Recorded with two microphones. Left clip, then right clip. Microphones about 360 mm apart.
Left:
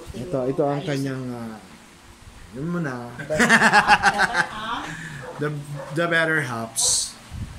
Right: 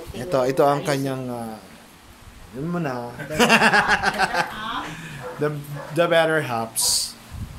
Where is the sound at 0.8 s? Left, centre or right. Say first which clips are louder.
Right 3 dB; centre.